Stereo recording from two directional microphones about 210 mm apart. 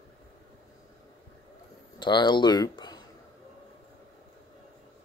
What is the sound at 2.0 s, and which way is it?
Speech, 20° left (ahead or behind).